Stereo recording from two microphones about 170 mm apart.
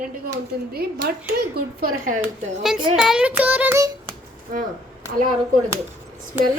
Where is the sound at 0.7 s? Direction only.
65° right (ahead or behind).